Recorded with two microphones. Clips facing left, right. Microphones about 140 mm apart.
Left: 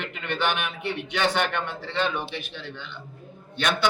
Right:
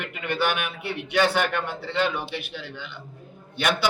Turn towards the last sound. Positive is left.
turn(degrees=-10)  # may be behind; listen again after turning